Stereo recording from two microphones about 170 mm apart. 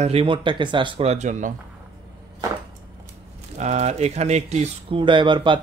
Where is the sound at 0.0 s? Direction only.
35° right (ahead or behind).